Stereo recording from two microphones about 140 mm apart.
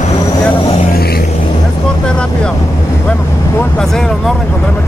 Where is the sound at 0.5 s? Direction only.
45° left (ahead or behind).